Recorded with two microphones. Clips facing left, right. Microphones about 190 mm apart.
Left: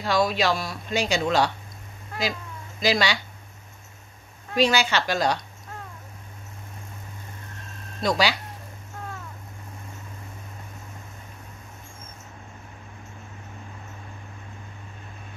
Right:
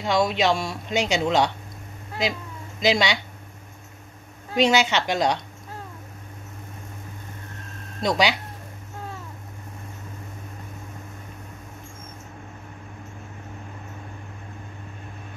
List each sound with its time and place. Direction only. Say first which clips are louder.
0.0 s speech: right 1 dB; 20° right (ahead or behind)
2.8 s speech: right 2 dB; 20° right (ahead or behind)
4.6 s speech: right 2 dB; 20° right (ahead or behind)
8.0 s speech: right 1 dB; 20° right (ahead or behind)